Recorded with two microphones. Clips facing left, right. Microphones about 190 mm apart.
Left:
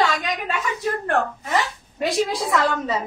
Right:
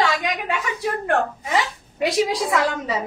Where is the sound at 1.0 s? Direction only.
15° right (ahead or behind).